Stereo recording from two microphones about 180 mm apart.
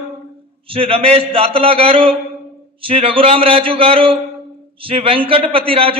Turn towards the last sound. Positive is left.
turn(degrees=-30)  # may be behind; listen again after turning